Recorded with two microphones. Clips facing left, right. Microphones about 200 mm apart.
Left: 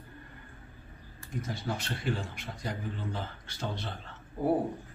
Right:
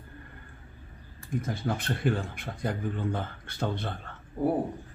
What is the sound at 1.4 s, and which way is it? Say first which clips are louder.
Speech: right 4 dB; 55° right (ahead or behind).